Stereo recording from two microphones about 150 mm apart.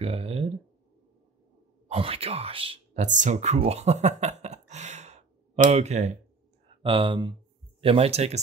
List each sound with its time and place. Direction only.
0.0 s a sound: 40° right (ahead or behind)
1.9 s speech: 40° right (ahead or behind)
6.8 s speech: 35° right (ahead or behind)